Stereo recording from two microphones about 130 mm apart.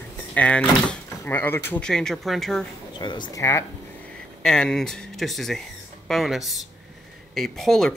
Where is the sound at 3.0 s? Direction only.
35° left (ahead or behind).